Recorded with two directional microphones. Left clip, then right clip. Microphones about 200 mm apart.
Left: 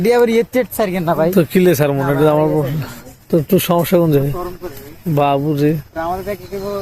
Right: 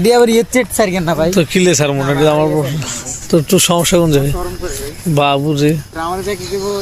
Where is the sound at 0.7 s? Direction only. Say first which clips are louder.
Right 4 dB; 25° right (ahead or behind).